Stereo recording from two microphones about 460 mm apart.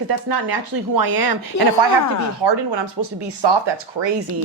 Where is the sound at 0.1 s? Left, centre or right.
Right.